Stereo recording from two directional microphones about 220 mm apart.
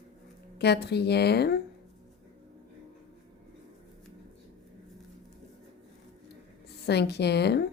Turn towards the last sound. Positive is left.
turn(degrees=50)  # may be behind; listen again after turning